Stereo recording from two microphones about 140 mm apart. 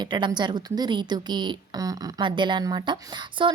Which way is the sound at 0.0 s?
30° right (ahead or behind).